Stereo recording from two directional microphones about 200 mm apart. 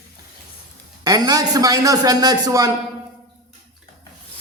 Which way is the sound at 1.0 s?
20° right (ahead or behind).